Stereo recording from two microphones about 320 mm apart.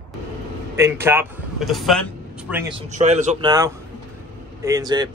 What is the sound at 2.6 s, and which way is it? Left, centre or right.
A man's voice, right.